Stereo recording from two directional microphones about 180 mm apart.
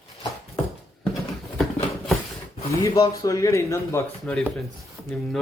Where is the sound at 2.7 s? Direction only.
15° left (ahead or behind).